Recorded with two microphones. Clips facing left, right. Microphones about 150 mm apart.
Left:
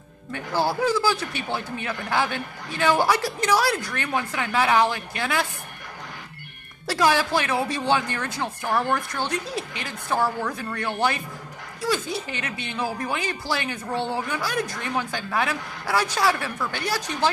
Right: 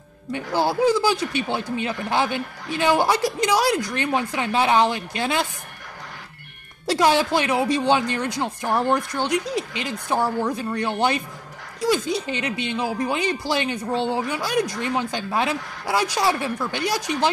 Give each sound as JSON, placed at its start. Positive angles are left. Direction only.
{"t": 0.3, "sound": "speech", "side_deg": -15}
{"t": 6.9, "sound": "speech", "side_deg": -20}